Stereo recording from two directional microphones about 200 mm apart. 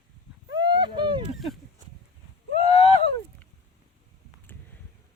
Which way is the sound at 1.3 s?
Centre (ahead or behind).